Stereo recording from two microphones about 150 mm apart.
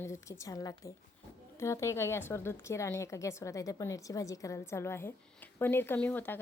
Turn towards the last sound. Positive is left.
turn(degrees=10)  # may be behind; listen again after turning